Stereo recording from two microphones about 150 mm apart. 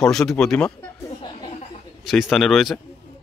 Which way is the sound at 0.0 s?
Centre (ahead or behind).